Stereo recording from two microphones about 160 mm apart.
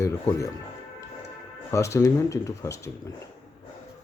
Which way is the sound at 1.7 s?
20° left (ahead or behind).